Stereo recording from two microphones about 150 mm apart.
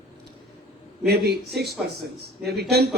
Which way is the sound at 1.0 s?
90° right.